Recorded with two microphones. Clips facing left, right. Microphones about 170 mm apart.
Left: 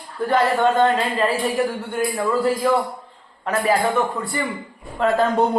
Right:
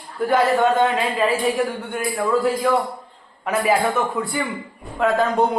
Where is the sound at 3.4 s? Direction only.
5° right (ahead or behind).